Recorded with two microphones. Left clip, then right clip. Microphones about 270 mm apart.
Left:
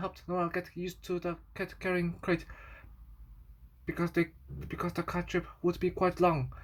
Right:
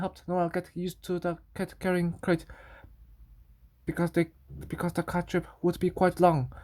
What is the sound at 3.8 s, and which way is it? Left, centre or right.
Speech, right.